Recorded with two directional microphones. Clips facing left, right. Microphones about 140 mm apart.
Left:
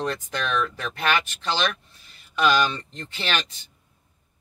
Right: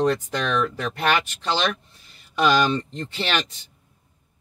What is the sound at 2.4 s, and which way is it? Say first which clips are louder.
Speech: right 2 dB; 20° right (ahead or behind).